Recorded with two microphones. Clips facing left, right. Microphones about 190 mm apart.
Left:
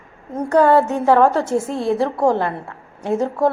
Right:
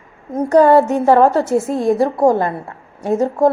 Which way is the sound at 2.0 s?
10° right (ahead or behind).